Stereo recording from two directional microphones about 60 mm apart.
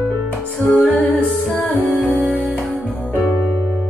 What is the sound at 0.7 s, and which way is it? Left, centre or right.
Music, centre.